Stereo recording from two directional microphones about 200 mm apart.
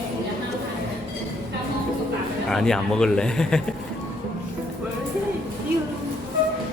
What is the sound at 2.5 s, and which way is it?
Speech, centre (ahead or behind).